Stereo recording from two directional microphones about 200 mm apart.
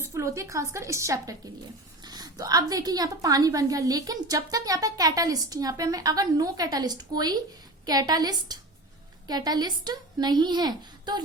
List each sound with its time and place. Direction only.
0.0 s a woman's voice: 15° right (ahead or behind)